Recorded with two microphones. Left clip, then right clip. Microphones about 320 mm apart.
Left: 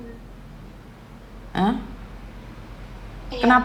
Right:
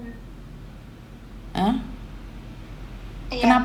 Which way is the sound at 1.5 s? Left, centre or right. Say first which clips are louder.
Left 1 dB; left.